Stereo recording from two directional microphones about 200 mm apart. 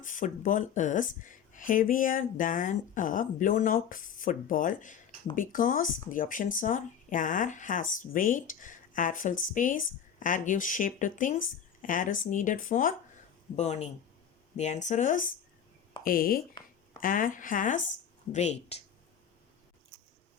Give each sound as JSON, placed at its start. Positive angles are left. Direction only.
{"t": 0.0, "sound": "speech", "side_deg": 40}